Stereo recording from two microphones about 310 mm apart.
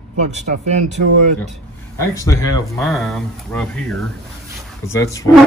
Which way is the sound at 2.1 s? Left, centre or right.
Centre.